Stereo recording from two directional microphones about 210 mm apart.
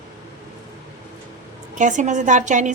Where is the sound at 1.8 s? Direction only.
35° right (ahead or behind).